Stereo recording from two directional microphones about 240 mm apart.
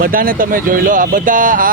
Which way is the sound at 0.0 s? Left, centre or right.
Right.